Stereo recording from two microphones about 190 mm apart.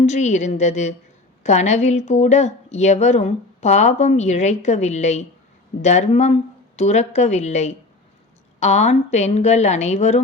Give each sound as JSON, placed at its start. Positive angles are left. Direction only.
{"t": 0.0, "sound": "a woman's voice", "side_deg": 35}